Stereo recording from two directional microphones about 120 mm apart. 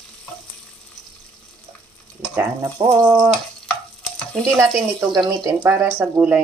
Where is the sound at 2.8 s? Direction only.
60° right (ahead or behind).